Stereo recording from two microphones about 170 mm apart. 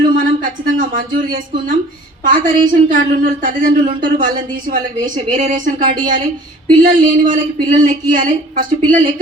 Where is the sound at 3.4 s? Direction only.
55° right (ahead or behind).